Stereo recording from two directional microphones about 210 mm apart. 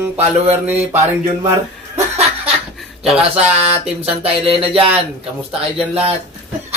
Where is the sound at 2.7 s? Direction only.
5° right (ahead or behind).